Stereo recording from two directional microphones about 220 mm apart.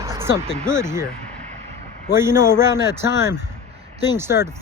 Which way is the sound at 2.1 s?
10° right (ahead or behind).